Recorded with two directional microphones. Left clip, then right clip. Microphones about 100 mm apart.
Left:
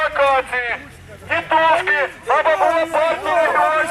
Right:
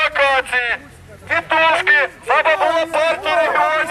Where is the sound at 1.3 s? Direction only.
55° right (ahead or behind).